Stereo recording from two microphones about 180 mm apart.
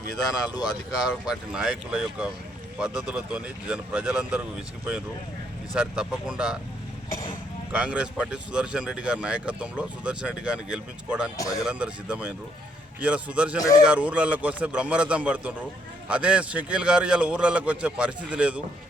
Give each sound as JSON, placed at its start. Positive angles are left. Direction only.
{"t": 0.2, "sound": "speech", "side_deg": 20}
{"t": 0.9, "sound": "speech", "side_deg": -5}
{"t": 5.7, "sound": "speech", "side_deg": -5}
{"t": 7.7, "sound": "speech", "side_deg": -5}
{"t": 11.3, "sound": "speech", "side_deg": 20}
{"t": 11.6, "sound": "a man's voice", "side_deg": -5}